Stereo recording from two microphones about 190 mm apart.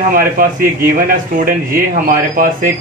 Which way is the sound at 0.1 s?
50° right (ahead or behind).